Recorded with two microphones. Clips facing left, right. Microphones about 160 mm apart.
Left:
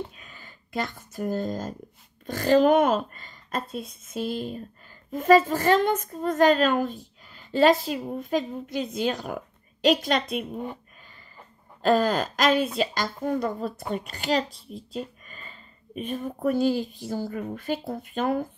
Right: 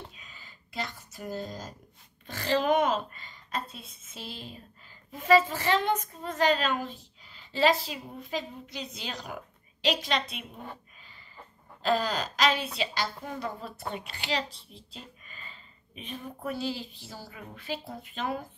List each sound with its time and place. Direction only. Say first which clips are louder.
0.1 s a sound: left 4 dB; 50° left (ahead or behind)
2.2 s a woman's voice: left 8 dB; 45° left (ahead or behind)
11.8 s a woman's voice: left 6 dB; 50° left (ahead or behind)